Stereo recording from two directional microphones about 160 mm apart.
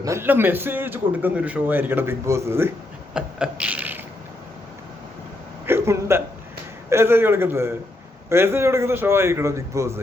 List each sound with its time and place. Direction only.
0.0 s a man's voice: 15° right (ahead or behind)
3.2 s mechanisms: 5° right (ahead or behind)
5.6 s a sound: 15° right (ahead or behind)
6.9 s a man's voice: 15° right (ahead or behind)